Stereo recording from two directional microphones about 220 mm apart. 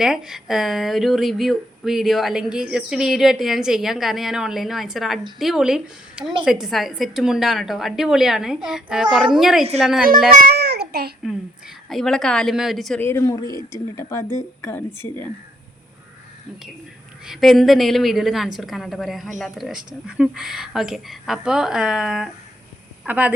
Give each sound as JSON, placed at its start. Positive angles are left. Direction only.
{"t": 0.0, "sound": "speech", "side_deg": 0}
{"t": 10.4, "sound": "child singing", "side_deg": -45}
{"t": 11.9, "sound": "a woman's voice", "side_deg": 0}
{"t": 17.2, "sound": "a woman's voice", "side_deg": 0}